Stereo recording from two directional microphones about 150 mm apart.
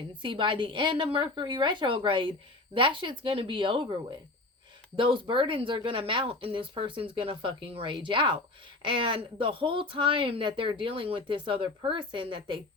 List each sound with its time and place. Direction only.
0.2 s speech: 35° right (ahead or behind)